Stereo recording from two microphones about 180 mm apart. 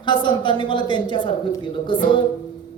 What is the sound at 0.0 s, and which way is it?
Speech, 25° left (ahead or behind).